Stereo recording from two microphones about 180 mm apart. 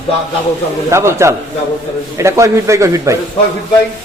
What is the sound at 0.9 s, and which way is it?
A man's voice, 15° right (ahead or behind).